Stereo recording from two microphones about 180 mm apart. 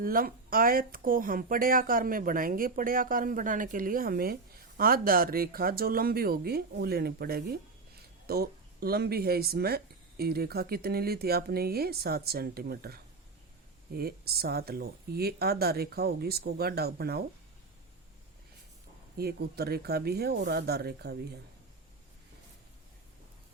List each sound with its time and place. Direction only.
0.0 s speech: 55° right (ahead or behind)
19.1 s speech: 60° right (ahead or behind)